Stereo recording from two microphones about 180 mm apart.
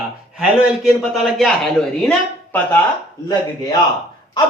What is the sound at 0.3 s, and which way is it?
Speech, centre (ahead or behind).